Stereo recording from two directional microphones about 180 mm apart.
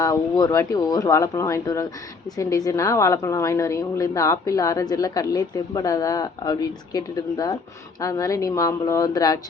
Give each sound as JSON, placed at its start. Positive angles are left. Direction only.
{"t": 0.0, "sound": "a woman's voice", "side_deg": 20}